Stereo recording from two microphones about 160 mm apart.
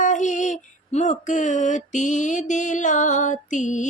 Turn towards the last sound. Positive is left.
turn(degrees=50)  # may be behind; listen again after turning